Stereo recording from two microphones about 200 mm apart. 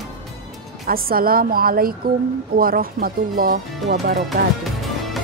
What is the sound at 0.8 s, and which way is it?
Speech, 45° right (ahead or behind).